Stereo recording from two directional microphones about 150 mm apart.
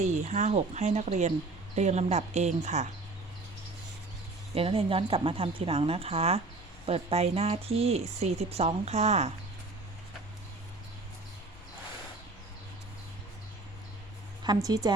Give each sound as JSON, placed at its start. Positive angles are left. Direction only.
{"t": 0.0, "sound": "speech", "side_deg": -50}
{"t": 4.5, "sound": "speech", "side_deg": -40}
{"t": 14.4, "sound": "a woman's voice", "side_deg": -25}